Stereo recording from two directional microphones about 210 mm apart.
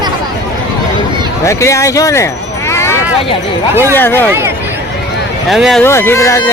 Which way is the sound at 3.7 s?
15° right (ahead or behind).